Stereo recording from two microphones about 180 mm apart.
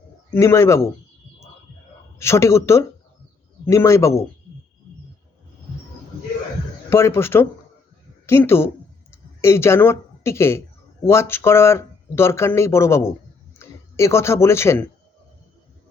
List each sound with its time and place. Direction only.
0.3 s speech: 15° left (ahead or behind)
2.1 s speech: 15° left (ahead or behind)
6.9 s speech: 15° left (ahead or behind)